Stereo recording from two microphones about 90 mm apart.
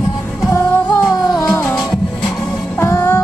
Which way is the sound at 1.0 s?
30° left (ahead or behind).